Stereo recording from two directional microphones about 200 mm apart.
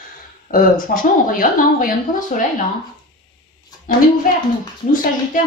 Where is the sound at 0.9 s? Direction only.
45° left (ahead or behind).